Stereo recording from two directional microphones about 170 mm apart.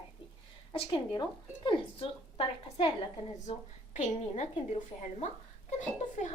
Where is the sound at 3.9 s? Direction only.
45° left (ahead or behind).